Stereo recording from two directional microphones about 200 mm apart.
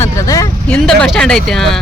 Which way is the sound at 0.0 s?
15° left (ahead or behind).